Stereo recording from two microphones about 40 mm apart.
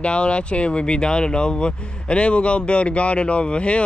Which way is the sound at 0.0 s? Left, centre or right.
Left.